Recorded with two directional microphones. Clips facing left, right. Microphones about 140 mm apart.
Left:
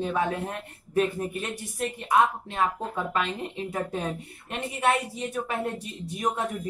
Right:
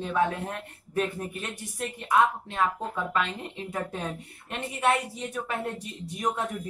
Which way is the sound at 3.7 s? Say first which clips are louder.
Left 2 dB; 10° left (ahead or behind).